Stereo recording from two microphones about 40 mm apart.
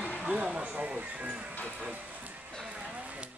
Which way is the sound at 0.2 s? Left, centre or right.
Right.